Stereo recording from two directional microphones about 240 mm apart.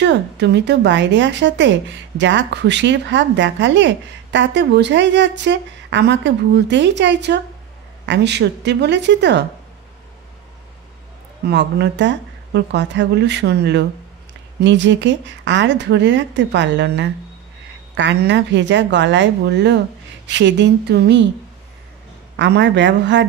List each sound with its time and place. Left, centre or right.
0.0 s a woman's voice: right
11.4 s a woman's voice: right
22.4 s a woman's voice: right